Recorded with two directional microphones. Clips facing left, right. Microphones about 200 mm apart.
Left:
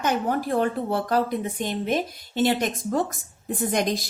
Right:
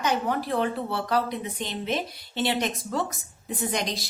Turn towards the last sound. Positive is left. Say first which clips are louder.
# left 5 dB
turn(degrees=50)  # may be behind; listen again after turning